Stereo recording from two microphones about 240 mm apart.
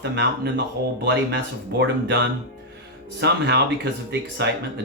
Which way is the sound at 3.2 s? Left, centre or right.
Right.